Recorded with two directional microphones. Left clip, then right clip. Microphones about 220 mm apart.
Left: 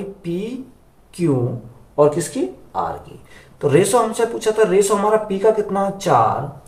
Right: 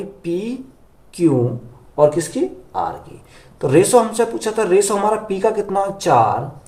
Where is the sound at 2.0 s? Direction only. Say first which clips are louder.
Right 1 dB; 25° right (ahead or behind).